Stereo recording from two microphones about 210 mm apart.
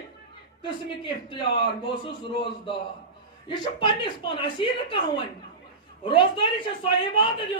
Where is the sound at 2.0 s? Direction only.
25° left (ahead or behind).